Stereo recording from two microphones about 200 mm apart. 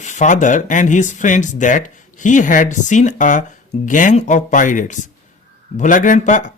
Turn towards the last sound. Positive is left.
turn(degrees=40)  # may be behind; listen again after turning